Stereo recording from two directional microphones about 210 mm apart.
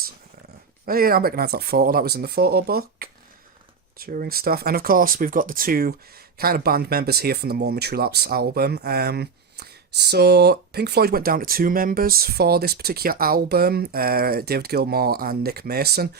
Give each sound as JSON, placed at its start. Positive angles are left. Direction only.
{"t": 0.9, "sound": "speech", "side_deg": -45}